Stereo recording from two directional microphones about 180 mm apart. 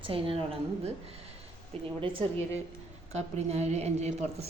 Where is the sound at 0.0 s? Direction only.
30° right (ahead or behind).